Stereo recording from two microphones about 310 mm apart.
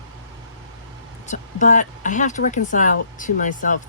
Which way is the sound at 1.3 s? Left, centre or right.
Left.